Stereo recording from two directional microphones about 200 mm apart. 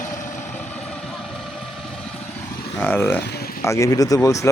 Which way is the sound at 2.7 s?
10° left (ahead or behind).